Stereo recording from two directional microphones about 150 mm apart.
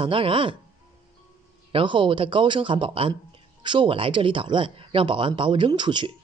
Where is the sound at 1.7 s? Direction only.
35° right (ahead or behind).